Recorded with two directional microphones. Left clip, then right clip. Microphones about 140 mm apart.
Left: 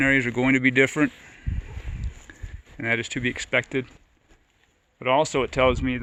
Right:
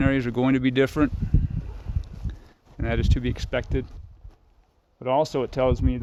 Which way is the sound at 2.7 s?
35° right (ahead or behind).